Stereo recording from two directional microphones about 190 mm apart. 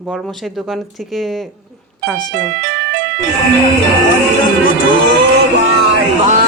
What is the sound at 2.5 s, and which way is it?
Music, 60° right (ahead or behind).